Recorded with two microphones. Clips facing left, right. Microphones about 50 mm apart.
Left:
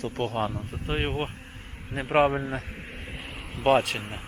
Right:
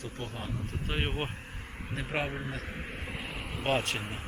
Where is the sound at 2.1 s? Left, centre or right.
Left.